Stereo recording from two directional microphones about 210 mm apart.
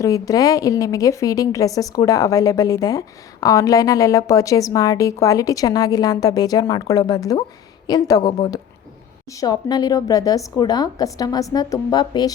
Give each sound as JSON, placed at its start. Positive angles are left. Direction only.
{"t": 0.0, "sound": "a woman's voice", "side_deg": 15}